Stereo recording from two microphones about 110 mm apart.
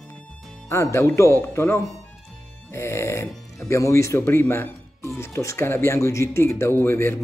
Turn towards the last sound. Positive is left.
turn(degrees=20)  # may be behind; listen again after turning